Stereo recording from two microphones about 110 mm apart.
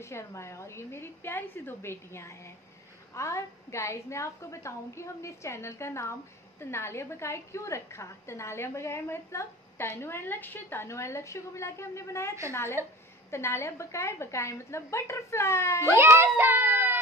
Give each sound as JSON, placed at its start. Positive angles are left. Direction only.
{"t": 0.0, "sound": "a woman's voice", "side_deg": 25}
{"t": 12.8, "sound": "a woman's voice", "side_deg": -25}
{"t": 13.3, "sound": "a woman's voice", "side_deg": 25}
{"t": 16.0, "sound": "a child's voice", "side_deg": -20}